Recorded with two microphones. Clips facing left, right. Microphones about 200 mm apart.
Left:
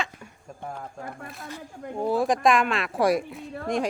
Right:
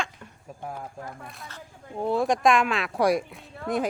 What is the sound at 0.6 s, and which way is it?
Speech, 10° right (ahead or behind).